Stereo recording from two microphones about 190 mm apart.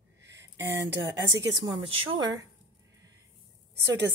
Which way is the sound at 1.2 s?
75° right (ahead or behind).